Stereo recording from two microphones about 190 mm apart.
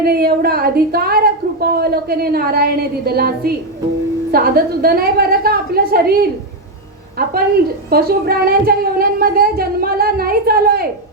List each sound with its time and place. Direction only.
0.0 s a woman's voice: 55° right (ahead or behind)